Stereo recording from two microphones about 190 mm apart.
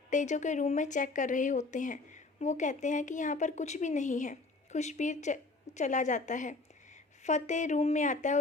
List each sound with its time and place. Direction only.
0.1 s speech: 40° left (ahead or behind)